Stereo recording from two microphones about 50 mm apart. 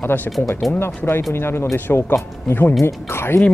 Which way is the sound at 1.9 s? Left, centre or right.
Left.